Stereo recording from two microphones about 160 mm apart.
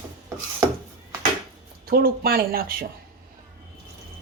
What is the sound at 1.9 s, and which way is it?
Speech, 70° right (ahead or behind).